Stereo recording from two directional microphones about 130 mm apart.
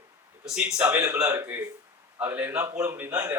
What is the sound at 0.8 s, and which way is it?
A man's voice, 20° right (ahead or behind).